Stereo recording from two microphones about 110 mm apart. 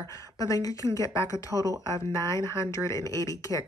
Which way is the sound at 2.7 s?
30° left (ahead or behind).